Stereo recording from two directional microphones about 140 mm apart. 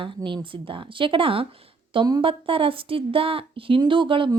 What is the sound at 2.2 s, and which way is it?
A woman's voice, 40° right (ahead or behind).